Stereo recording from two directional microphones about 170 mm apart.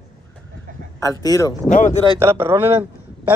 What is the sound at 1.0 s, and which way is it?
Speech, 20° left (ahead or behind).